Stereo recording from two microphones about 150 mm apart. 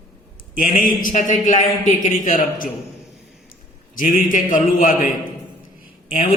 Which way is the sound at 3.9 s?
65° left (ahead or behind).